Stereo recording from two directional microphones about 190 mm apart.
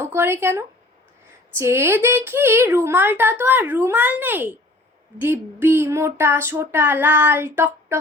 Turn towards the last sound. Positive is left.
turn(degrees=-10)  # may be behind; listen again after turning